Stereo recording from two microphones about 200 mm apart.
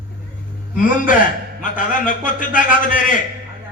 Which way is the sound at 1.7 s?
40° left (ahead or behind).